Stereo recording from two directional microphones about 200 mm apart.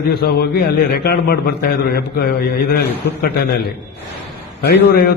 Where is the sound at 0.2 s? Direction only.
50° left (ahead or behind).